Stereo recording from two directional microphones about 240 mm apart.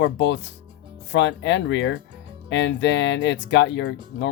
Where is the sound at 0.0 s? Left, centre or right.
Left.